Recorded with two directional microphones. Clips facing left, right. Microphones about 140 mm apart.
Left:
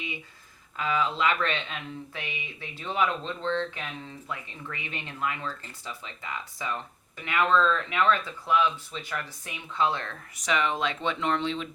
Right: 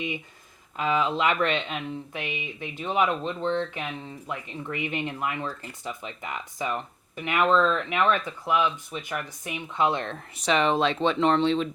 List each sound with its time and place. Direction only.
0.8 s speech: 20° right (ahead or behind); by 11.7 s 35° right (ahead or behind)